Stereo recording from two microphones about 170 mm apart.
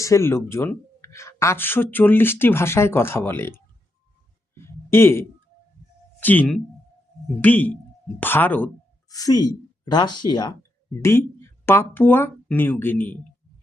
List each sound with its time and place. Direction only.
0.0 s speech: 15° left (ahead or behind)
4.5 s a sound: 15° left (ahead or behind)
6.1 s speech: 10° left (ahead or behind)
9.1 s speech: 20° left (ahead or behind)